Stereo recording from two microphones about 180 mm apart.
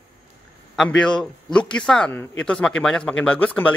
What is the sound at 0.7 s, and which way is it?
Speech, 5° left (ahead or behind).